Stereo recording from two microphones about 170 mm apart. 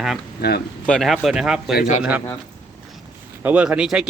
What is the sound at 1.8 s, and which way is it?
Speech, 45° left (ahead or behind).